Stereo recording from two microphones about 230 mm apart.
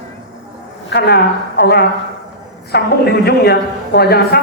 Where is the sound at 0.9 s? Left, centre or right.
Left.